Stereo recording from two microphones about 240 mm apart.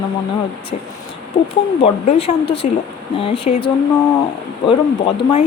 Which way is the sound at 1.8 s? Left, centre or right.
Left.